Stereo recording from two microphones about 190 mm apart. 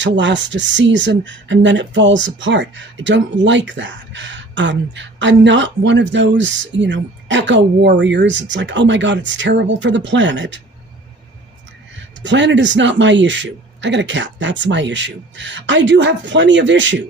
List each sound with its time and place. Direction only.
0.0 s speech: 70° right (ahead or behind)
12.2 s speech: 70° right (ahead or behind)